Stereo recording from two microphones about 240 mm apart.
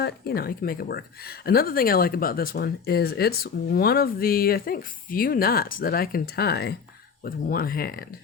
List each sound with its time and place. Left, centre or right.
0.0 s speech: left